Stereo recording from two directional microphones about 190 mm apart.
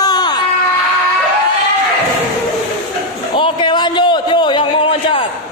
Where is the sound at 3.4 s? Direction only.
25° left (ahead or behind).